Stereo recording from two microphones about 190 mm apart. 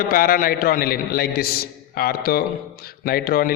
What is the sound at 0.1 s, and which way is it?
A man's voice, 50° left (ahead or behind).